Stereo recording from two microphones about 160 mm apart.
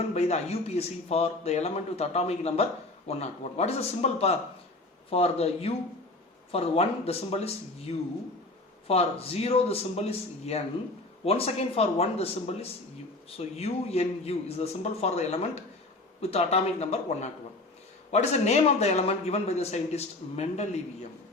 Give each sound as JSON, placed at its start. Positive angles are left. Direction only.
{"t": 0.1, "sound": "speech", "side_deg": 45}
{"t": 13.6, "sound": "a man's voice", "side_deg": 40}